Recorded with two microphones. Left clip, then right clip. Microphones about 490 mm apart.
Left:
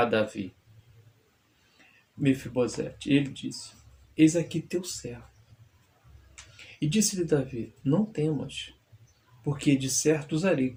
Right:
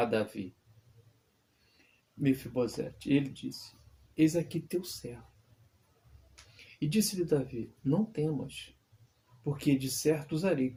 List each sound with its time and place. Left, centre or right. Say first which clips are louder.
0.0 s speech: left 5 dB; right
2.2 s speech: left 4 dB; right
6.7 s speech: left 4 dB; right